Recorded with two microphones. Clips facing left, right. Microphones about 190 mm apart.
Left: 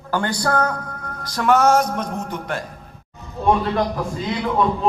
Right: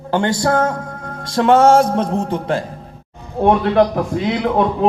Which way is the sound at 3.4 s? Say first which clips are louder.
Right 6 dB; 65° right (ahead or behind).